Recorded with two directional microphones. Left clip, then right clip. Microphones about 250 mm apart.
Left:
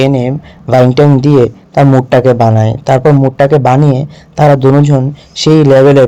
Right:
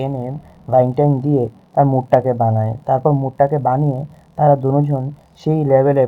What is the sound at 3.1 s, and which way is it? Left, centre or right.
A man's voice, left.